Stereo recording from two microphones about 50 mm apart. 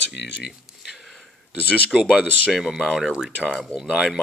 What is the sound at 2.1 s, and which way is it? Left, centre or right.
Speech, right.